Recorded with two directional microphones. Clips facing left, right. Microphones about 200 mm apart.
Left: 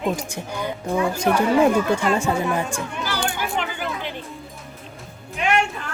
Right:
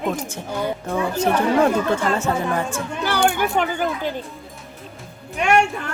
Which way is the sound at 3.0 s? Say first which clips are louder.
Right 9 dB; 55° right (ahead or behind).